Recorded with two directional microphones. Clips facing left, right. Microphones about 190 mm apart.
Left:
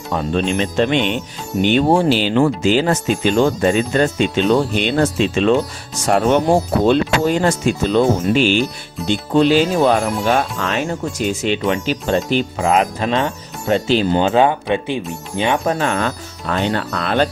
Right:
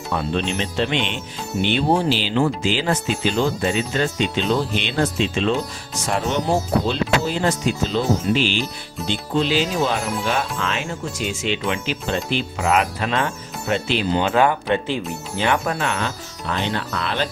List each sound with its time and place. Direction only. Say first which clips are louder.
0.1 s speech: left 4 dB; 45° left (ahead or behind)
12.5 s speech: left 1 dB; 35° left (ahead or behind)
14.3 s speech: left 3 dB; 20° left (ahead or behind)
15.7 s speech: left 5 dB; 45° left (ahead or behind)